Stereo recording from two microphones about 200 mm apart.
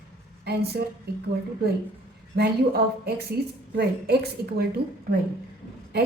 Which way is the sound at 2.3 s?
55° right (ahead or behind).